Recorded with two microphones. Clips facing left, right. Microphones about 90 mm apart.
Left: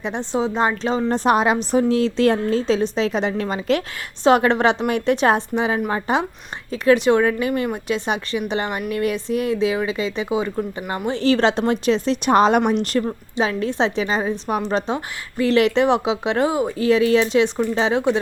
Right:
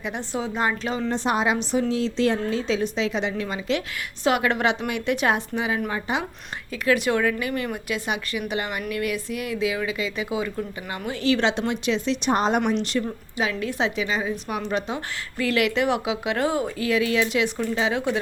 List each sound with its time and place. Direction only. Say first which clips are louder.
0.0 s speech: left 6 dB; 25° left (ahead or behind)
1.0 s a woman's voice: left 6 dB; 55° left (ahead or behind)
1.9 s a woman's voice: left 6 dB; 60° left (ahead or behind)
4.2 s speech: left 6 dB; 30° left (ahead or behind)
6.8 s speech: left 6 dB; 25° left (ahead or behind)
12.3 s speech: left 7 dB; 80° left; by 13.1 s 45° left (ahead or behind)
13.3 s speech: left 5 dB; 35° left (ahead or behind)